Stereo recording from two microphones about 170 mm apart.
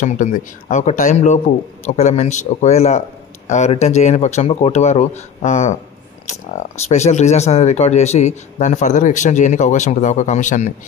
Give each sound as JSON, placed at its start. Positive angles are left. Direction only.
{"t": 0.0, "sound": "speech", "side_deg": 50}
{"t": 6.9, "sound": "speech", "side_deg": 40}